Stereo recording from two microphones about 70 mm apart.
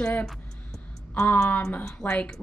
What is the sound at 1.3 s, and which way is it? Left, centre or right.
A woman's voice, left.